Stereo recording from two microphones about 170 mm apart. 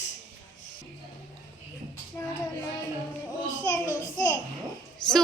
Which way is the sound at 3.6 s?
20° left (ahead or behind).